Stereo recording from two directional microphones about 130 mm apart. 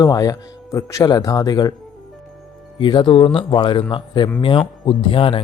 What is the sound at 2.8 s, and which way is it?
Speech, 40° left (ahead or behind).